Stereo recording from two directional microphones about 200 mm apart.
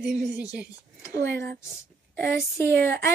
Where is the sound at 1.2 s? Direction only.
15° left (ahead or behind).